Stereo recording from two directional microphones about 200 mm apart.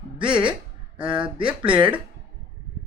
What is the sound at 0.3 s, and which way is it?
Speech, 5° right (ahead or behind).